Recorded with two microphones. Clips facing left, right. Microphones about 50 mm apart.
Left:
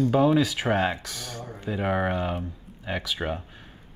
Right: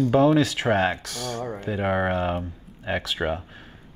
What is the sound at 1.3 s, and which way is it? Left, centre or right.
Speech, right.